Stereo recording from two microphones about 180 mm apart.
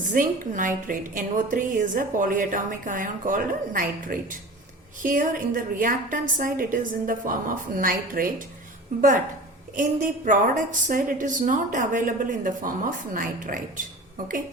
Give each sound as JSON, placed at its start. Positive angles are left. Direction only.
{"t": 0.1, "sound": "a woman's voice", "side_deg": -45}